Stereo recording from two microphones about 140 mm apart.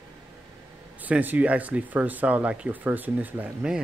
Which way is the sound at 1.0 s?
10° right (ahead or behind).